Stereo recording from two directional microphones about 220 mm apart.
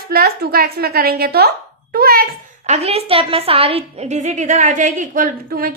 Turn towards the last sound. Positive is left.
turn(degrees=-40)  # may be behind; listen again after turning